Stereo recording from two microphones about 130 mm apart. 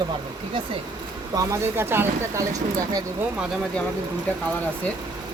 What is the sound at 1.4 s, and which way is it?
Speech, 25° right (ahead or behind).